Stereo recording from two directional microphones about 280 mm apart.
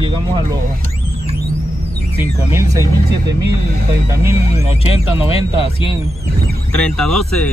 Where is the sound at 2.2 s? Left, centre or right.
Centre.